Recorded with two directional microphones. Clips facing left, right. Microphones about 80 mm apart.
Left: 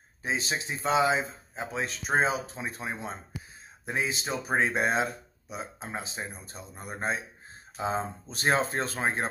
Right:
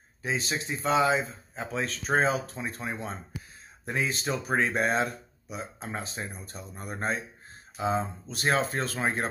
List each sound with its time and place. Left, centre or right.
0.2 s speech: left
7.7 s speech: left